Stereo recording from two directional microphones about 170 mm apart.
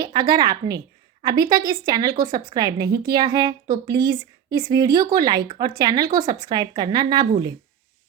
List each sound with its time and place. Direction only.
0.0 s speech: 25° right (ahead or behind)